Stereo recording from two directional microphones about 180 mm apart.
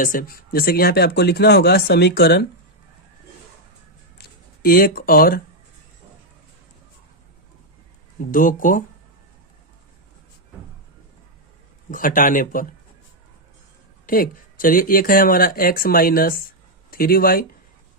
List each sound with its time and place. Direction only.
0.0 s speech: 50° left (ahead or behind)
4.2 s speech: 55° left (ahead or behind)
8.2 s speech: 50° left (ahead or behind)
11.9 s speech: 50° left (ahead or behind)
14.1 s speech: 50° left (ahead or behind)